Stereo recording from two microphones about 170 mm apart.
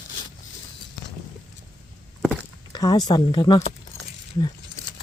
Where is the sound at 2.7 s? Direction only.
25° left (ahead or behind).